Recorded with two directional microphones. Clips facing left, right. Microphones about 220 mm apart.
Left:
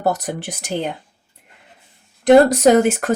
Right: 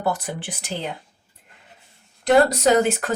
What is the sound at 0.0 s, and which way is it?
Speech, 40° left (ahead or behind).